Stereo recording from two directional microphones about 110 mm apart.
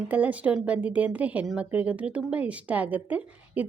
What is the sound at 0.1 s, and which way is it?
A woman's voice, 15° right (ahead or behind).